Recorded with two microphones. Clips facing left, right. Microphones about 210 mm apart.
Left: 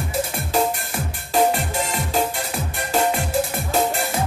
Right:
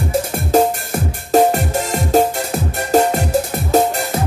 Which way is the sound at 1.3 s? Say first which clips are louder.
Right 6 dB; 45° right (ahead or behind).